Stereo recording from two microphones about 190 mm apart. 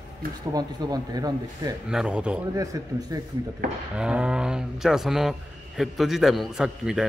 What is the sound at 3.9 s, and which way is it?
A man's voice, 5° right (ahead or behind).